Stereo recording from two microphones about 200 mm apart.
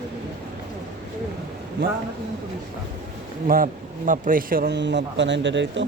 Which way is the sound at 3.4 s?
45° right (ahead or behind).